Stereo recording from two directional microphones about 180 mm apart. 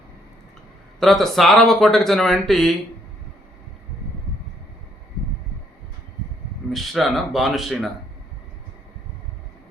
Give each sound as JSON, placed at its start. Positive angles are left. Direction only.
{"t": 0.9, "sound": "speech", "side_deg": 0}
{"t": 6.7, "sound": "speech", "side_deg": 0}